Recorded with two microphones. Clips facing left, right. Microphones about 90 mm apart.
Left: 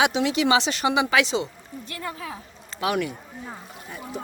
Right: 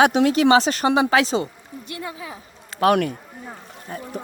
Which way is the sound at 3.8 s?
45° right (ahead or behind).